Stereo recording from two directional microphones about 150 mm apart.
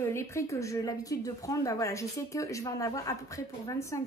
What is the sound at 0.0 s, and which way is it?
Speech, 20° left (ahead or behind).